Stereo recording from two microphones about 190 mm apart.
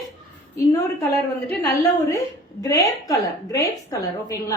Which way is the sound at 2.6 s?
20° left (ahead or behind).